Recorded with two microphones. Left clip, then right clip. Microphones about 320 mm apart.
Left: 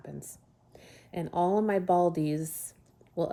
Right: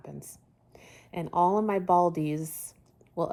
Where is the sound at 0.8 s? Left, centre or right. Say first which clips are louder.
Right 2 dB; centre.